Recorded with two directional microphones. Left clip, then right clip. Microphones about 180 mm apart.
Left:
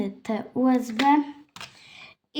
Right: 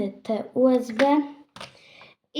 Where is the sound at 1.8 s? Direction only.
55° left (ahead or behind).